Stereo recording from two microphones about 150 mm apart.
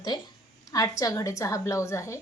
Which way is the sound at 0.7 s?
25° left (ahead or behind).